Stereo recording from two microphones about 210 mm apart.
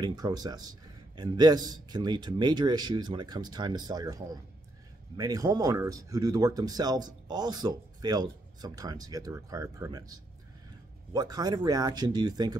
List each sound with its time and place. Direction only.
0.0 s a man's voice: 20° right (ahead or behind)
11.1 s a man's voice: 20° right (ahead or behind)